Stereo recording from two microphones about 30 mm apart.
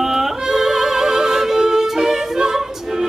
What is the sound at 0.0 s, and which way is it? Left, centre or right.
Music, centre.